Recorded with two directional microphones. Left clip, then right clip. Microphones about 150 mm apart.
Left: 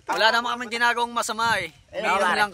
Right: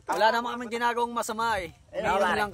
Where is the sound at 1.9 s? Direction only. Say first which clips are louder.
Left 3 dB; 55° left (ahead or behind).